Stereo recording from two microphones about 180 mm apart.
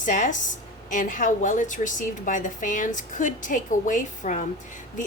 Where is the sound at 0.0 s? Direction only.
45° left (ahead or behind).